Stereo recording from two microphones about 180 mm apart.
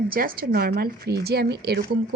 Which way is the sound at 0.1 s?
55° right (ahead or behind).